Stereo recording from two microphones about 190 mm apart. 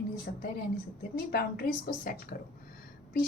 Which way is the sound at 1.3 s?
50° left (ahead or behind).